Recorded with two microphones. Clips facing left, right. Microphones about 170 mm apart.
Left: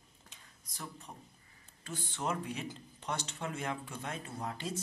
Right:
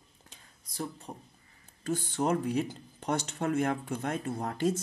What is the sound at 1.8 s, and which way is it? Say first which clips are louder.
Speech: right 8 dB; 45° right (ahead or behind).